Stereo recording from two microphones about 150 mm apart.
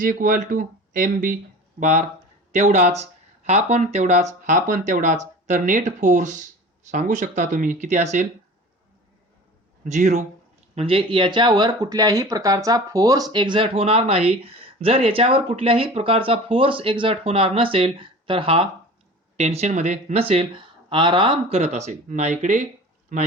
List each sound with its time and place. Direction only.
0.0 s speech: 65° right (ahead or behind)
1.8 s speech: 50° right (ahead or behind)
9.8 s speech: 55° right (ahead or behind)
10.8 s speech: 35° right (ahead or behind); by 22.6 s 55° right (ahead or behind)